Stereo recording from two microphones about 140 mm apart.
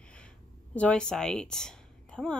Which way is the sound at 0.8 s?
5° left (ahead or behind).